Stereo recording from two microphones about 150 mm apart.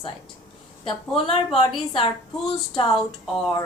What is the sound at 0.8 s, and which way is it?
Speech, 35° left (ahead or behind).